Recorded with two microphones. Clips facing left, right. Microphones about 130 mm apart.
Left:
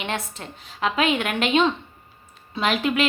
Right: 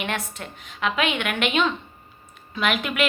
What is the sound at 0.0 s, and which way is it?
A woman's voice, 30° left (ahead or behind).